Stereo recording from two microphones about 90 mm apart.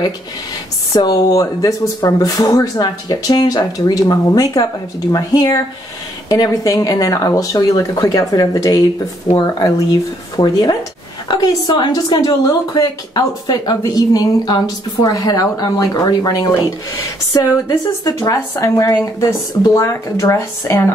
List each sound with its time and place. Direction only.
0.9 s a woman's voice: 45° left (ahead or behind)
19.8 s speech: 35° left (ahead or behind)